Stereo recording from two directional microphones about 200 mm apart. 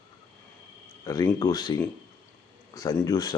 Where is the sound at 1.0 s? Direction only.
15° left (ahead or behind).